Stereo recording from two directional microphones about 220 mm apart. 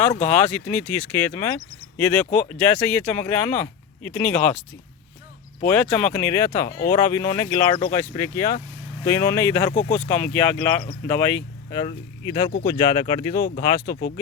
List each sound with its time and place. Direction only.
0.2 s speech: 10° left (ahead or behind)
5.6 s speech: 5° left (ahead or behind)